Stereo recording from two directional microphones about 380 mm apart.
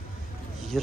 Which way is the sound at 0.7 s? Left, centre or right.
Centre.